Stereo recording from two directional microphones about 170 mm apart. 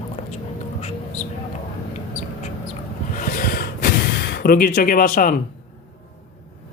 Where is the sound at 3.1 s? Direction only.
55° left (ahead or behind).